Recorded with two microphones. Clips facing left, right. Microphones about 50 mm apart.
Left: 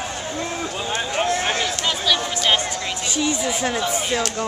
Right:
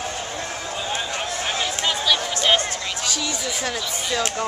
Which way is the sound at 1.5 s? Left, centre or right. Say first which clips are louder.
Left 1 dB; centre.